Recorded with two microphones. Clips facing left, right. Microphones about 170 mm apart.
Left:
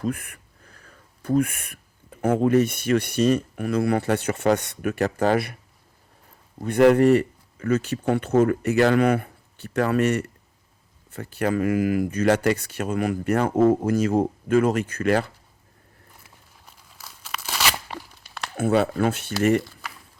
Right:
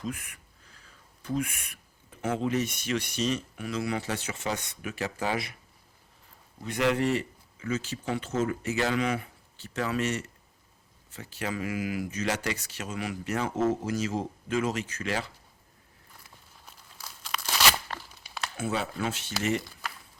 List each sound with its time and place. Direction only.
0.0 s a sound: 55° left (ahead or behind)
2.2 s speech: 55° left (ahead or behind)
6.6 s speech: 55° left (ahead or behind)
16.6 s tearing: 5° left (ahead or behind)
18.5 s speech: 60° left (ahead or behind)